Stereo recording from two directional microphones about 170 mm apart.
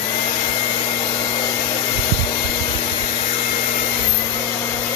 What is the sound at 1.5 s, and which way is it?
Hair dryer, 30° left (ahead or behind).